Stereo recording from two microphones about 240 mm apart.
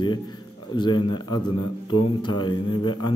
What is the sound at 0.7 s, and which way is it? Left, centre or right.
A man's voice, centre.